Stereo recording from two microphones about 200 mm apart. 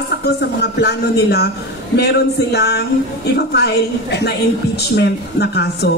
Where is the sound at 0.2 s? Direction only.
55° left (ahead or behind).